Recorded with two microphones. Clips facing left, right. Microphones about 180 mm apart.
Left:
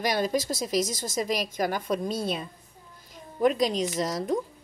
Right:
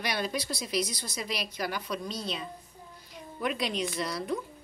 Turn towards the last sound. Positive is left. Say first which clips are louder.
# left 5 dB
turn(degrees=40)  # may be behind; listen again after turning